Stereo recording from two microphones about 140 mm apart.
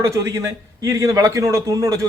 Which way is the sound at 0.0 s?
20° right (ahead or behind).